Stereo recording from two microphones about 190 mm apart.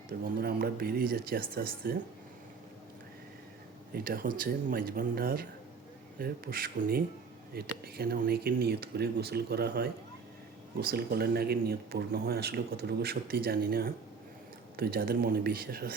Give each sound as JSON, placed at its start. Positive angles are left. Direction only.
{"t": 0.3, "sound": "speech", "side_deg": -55}
{"t": 3.9, "sound": "speech", "side_deg": -50}